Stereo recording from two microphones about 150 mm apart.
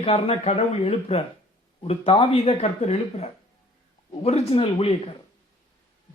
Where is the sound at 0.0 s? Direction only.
40° left (ahead or behind).